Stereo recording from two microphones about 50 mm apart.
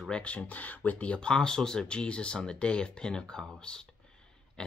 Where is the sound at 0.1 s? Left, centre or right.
Left.